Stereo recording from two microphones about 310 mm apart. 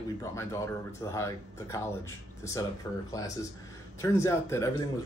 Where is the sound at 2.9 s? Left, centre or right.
Centre.